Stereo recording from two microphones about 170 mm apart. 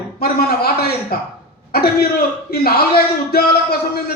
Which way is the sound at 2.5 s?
65° left (ahead or behind).